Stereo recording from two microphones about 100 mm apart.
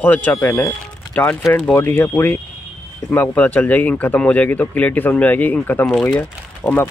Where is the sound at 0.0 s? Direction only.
15° left (ahead or behind).